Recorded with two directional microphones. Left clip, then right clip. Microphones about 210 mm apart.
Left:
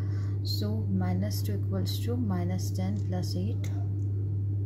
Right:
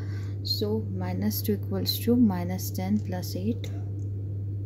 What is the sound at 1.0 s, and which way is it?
A woman's voice, 40° right (ahead or behind).